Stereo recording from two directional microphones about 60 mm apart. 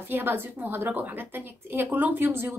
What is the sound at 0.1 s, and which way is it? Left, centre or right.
A woman's voice, right.